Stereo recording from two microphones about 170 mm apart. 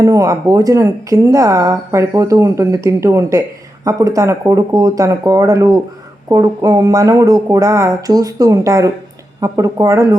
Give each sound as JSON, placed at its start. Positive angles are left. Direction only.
{"t": 0.0, "sound": "speech", "side_deg": -20}